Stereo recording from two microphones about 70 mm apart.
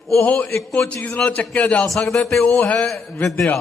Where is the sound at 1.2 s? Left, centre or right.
Centre.